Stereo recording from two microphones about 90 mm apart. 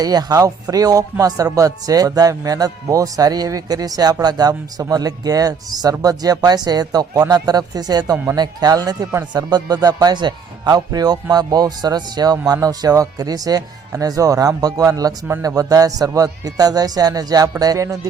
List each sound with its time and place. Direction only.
0.0 s speech: 45° right (ahead or behind)
8.1 s speech: 20° right (ahead or behind)
8.4 s a man's voice: 45° right (ahead or behind)